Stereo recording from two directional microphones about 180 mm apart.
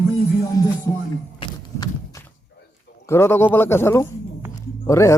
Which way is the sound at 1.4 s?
30° left (ahead or behind).